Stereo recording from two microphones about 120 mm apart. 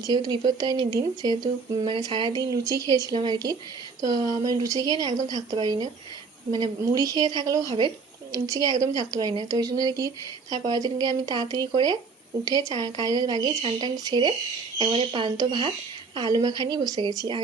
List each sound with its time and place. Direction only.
0.1 s a woman's voice: 35° right (ahead or behind)
15.4 s a woman's voice: 35° right (ahead or behind)